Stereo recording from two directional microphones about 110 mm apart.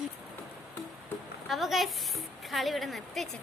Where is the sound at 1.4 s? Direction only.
Centre (ahead or behind).